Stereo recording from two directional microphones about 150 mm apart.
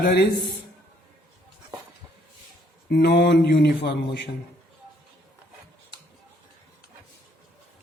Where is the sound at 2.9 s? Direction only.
90° left.